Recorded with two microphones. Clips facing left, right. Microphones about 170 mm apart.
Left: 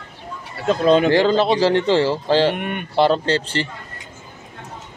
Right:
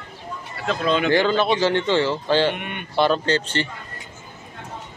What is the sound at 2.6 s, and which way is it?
Speech, 45° left (ahead or behind).